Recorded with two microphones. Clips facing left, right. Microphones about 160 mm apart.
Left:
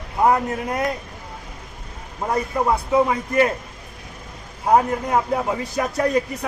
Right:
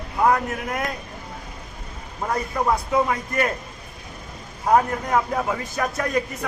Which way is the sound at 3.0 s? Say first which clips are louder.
Left 4 dB; 20° left (ahead or behind).